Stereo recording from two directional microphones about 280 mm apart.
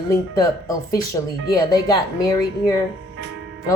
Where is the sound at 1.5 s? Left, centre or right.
Centre.